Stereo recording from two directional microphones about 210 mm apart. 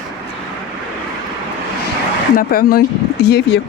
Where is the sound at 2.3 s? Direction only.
45° left (ahead or behind).